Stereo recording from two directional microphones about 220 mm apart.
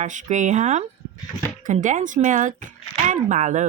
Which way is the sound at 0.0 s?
35° right (ahead or behind).